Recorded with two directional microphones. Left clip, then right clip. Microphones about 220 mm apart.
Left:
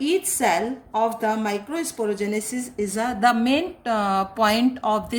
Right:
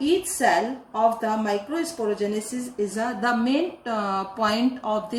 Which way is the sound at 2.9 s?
55° left (ahead or behind).